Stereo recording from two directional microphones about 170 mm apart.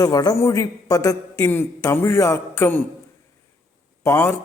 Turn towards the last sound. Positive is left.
turn(degrees=15)  # may be behind; listen again after turning